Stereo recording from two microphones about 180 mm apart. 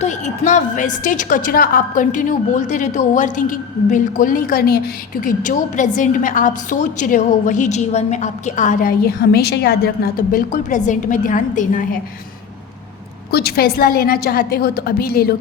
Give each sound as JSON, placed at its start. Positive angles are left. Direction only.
{"t": 0.0, "sound": "a woman's voice", "side_deg": 40}
{"t": 13.3, "sound": "a woman's voice", "side_deg": 60}